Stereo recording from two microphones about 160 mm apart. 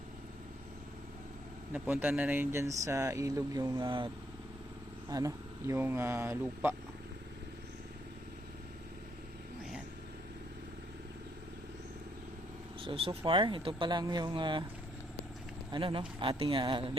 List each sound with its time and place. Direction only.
1.7 s speech: 10° right (ahead or behind); by 4.1 s 30° right (ahead or behind)
5.0 s speech: 20° right (ahead or behind)
12.8 s speech: 35° right (ahead or behind)
15.7 s speech: 30° right (ahead or behind)